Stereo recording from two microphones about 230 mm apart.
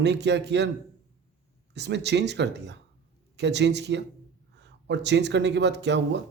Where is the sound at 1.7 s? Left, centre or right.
Right.